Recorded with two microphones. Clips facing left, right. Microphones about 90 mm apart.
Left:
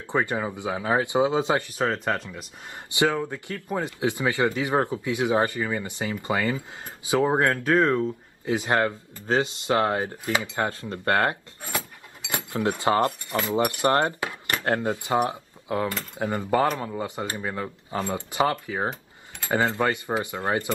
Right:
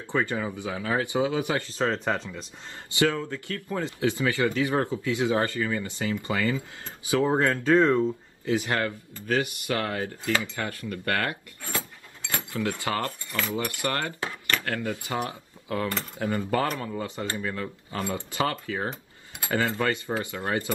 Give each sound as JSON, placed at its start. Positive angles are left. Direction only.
{"t": 0.0, "sound": "speech", "side_deg": 20}
{"t": 7.6, "sound": "speech", "side_deg": 5}
{"t": 8.5, "sound": "speech", "side_deg": 20}